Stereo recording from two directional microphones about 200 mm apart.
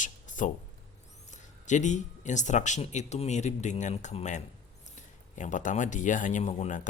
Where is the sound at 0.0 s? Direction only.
40° left (ahead or behind).